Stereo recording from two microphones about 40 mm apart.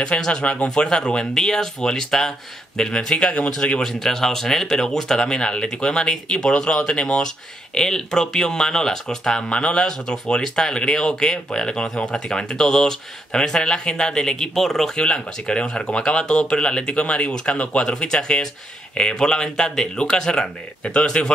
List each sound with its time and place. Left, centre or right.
0.2 s speech: left
7.7 s speech: centre
9.5 s speech: left; by 14.9 s centre
15.0 s speech: left